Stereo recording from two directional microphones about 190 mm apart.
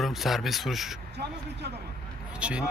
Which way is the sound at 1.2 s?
60° right (ahead or behind).